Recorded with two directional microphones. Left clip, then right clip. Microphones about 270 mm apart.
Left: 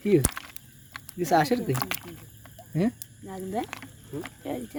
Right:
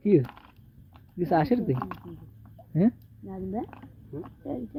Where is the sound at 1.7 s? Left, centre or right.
Left.